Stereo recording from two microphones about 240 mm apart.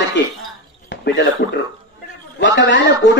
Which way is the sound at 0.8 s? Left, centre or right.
Left.